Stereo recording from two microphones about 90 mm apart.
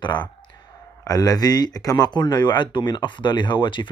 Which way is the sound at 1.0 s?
45° left (ahead or behind).